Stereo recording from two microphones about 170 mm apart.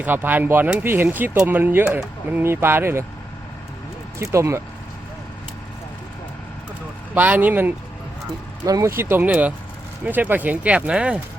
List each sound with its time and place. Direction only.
0.0 s speech: 10° right (ahead or behind)
4.2 s speech: 15° right (ahead or behind)
7.1 s speech: 10° right (ahead or behind)